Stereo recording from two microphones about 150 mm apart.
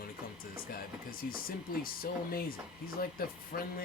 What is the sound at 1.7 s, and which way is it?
Speech, 75° left (ahead or behind).